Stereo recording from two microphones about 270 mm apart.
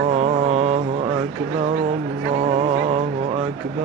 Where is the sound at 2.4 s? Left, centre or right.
Right.